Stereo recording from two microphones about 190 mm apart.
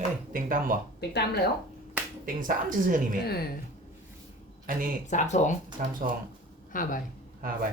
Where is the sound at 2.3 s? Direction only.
45° right (ahead or behind).